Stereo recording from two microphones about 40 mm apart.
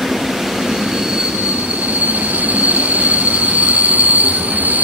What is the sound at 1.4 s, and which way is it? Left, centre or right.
Train wheels squealing, right.